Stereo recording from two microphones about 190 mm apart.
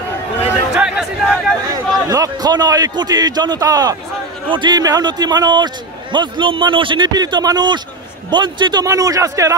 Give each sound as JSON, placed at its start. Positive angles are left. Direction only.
{"t": 0.7, "sound": "chatter", "side_deg": -5}
{"t": 2.0, "sound": "a man's voice", "side_deg": -20}